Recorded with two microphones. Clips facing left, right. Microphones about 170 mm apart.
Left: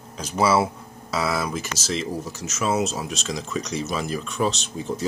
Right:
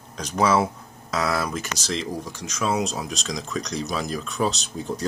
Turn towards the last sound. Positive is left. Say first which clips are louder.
# left 1 dB
turn(degrees=0)  # may be behind; listen again after turning